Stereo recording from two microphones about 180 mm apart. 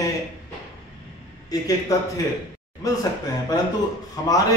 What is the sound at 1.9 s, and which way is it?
A man's voice, 20° left (ahead or behind).